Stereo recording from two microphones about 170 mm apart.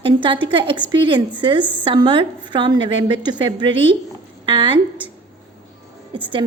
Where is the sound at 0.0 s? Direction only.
30° right (ahead or behind).